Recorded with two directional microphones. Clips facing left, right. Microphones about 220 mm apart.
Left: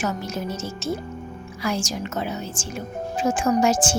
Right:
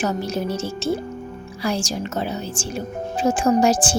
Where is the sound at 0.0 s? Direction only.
30° right (ahead or behind).